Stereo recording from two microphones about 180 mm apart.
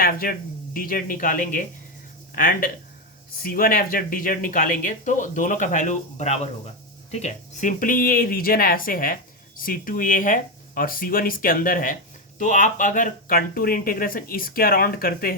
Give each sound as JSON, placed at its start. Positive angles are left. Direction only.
{"t": 0.0, "sound": "speech", "side_deg": 55}